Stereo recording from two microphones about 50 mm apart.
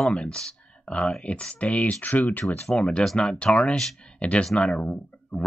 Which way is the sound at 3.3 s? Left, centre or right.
Centre.